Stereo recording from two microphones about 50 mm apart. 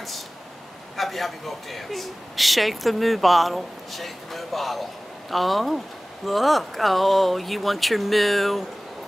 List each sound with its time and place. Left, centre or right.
0.9 s speech: centre